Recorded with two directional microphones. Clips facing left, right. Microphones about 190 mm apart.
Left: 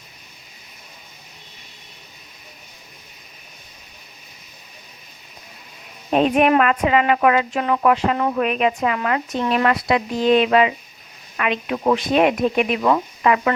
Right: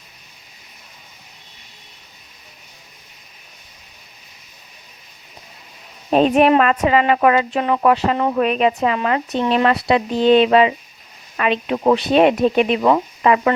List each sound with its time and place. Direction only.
6.1 s speech: 35° right (ahead or behind)